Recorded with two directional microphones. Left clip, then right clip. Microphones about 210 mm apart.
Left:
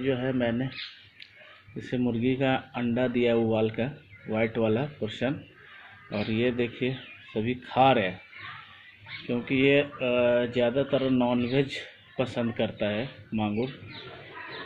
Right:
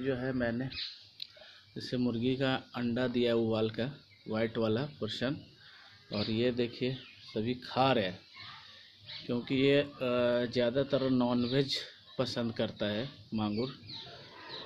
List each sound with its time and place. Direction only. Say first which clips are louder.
0.0 s speech: left 6 dB; centre (ahead or behind)
1.9 s speech: left 5 dB; 15° right (ahead or behind)
9.3 s speech: left 5 dB; 25° right (ahead or behind)